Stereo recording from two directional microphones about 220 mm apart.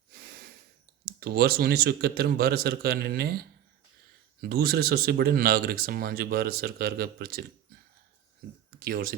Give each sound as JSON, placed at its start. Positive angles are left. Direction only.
{"t": 1.2, "sound": "speech", "side_deg": -45}
{"t": 8.8, "sound": "speech", "side_deg": -40}